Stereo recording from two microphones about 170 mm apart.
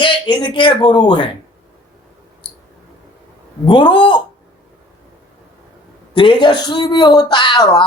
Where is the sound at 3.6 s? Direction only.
30° left (ahead or behind).